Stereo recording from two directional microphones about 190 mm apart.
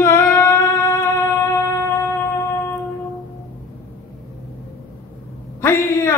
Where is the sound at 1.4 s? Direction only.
15° left (ahead or behind).